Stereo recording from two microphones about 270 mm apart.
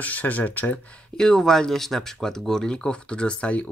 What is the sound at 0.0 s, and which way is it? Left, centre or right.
Speech, centre.